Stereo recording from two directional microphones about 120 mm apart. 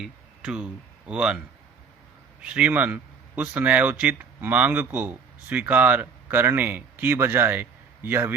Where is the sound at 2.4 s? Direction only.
10° right (ahead or behind).